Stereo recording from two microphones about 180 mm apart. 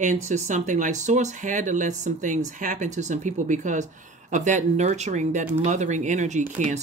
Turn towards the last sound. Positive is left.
turn(degrees=-40)  # may be behind; listen again after turning